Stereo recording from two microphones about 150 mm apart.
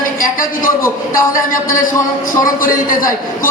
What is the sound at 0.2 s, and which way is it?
Speech, 65° left (ahead or behind).